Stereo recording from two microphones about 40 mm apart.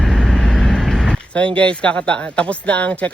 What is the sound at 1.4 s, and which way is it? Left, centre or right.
Speech, left.